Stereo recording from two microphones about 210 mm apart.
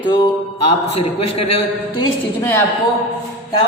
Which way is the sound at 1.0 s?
30° left (ahead or behind).